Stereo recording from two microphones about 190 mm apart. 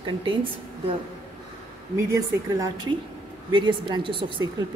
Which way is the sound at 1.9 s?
15° right (ahead or behind).